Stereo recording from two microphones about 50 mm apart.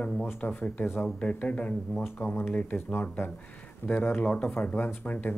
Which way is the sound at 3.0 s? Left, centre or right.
Left.